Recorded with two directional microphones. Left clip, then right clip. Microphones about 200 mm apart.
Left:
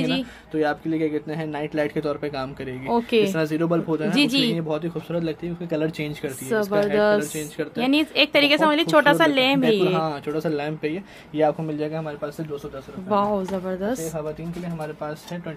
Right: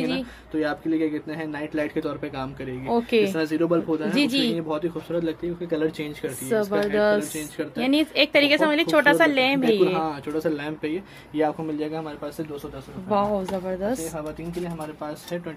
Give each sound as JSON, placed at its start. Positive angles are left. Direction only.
{"t": 0.6, "sound": "speech", "side_deg": 45}
{"t": 2.9, "sound": "a woman's voice", "side_deg": 15}
{"t": 3.3, "sound": "speech", "side_deg": 55}
{"t": 4.1, "sound": "a woman's voice", "side_deg": 15}
{"t": 4.6, "sound": "speech", "side_deg": 45}
{"t": 6.5, "sound": "a woman's voice", "side_deg": 15}
{"t": 9.9, "sound": "speech", "side_deg": 40}
{"t": 13.1, "sound": "a woman's voice", "side_deg": 15}